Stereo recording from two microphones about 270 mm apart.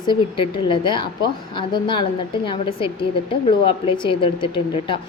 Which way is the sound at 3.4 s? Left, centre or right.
Centre.